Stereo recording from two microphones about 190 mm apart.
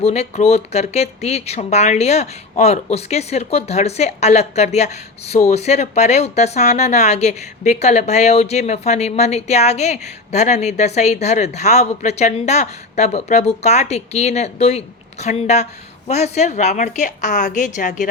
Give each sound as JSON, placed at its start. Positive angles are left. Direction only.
{"t": 0.0, "sound": "speech", "side_deg": 35}